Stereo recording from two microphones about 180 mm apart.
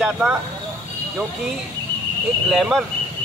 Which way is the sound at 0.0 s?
Centre (ahead or behind).